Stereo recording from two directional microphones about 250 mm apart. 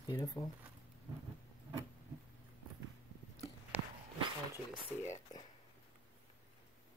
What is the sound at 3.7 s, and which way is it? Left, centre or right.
Walk, centre.